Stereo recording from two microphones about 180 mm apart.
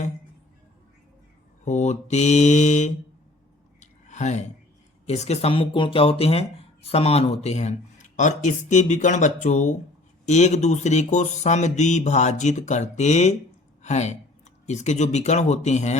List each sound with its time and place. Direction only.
1.6 s speech: 40° left (ahead or behind)
3.8 s a sound: 40° left (ahead or behind)
5.0 s speech: 40° left (ahead or behind)